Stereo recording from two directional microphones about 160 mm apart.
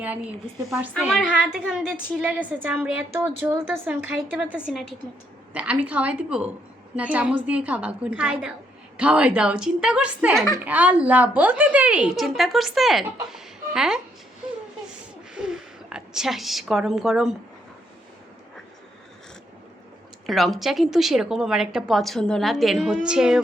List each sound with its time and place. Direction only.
0.8 s a woman's voice: 5° right (ahead or behind)
15.4 s a woman's voice: 5° right (ahead or behind)
20.2 s a woman's voice: centre (ahead or behind)